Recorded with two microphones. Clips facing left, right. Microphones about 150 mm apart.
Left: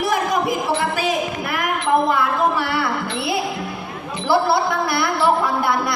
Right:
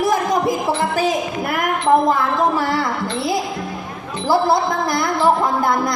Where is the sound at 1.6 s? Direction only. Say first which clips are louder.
Right 3 dB; 45° right (ahead or behind).